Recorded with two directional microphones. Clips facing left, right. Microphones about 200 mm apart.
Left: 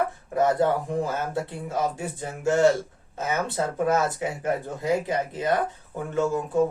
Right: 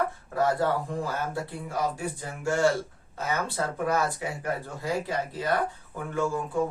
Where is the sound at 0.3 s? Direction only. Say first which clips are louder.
Left 4 dB; 20° left (ahead or behind).